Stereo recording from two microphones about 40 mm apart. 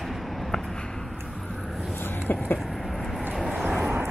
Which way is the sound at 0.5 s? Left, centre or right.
Centre.